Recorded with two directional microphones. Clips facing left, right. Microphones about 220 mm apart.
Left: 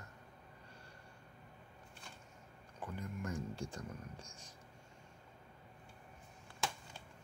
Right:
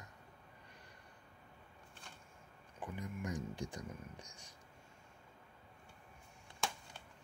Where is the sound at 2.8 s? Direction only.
15° right (ahead or behind).